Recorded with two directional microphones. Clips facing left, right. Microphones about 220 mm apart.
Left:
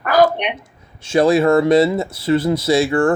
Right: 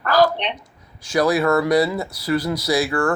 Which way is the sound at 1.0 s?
25° left (ahead or behind).